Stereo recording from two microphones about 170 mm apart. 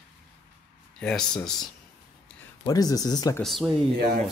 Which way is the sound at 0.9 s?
5° left (ahead or behind).